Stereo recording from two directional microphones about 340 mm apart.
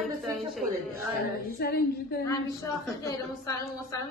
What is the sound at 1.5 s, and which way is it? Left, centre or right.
Female singing, left.